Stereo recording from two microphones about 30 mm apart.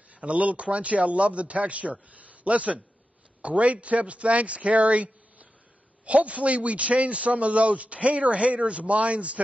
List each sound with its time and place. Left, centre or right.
0.1 s speech: right